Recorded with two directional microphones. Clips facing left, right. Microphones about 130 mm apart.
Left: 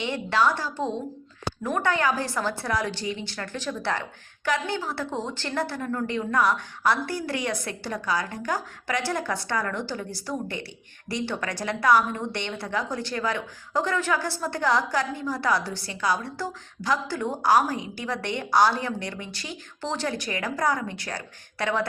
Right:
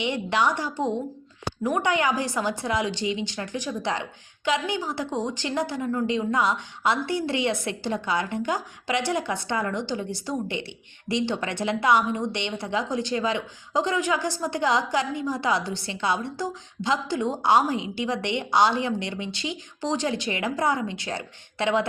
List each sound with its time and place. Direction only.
0.0 s a woman's voice: 15° right (ahead or behind)